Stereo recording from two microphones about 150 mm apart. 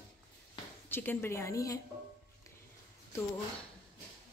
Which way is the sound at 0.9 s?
15° left (ahead or behind).